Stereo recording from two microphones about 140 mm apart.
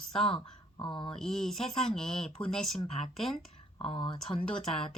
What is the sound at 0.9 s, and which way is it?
Speech, 40° left (ahead or behind).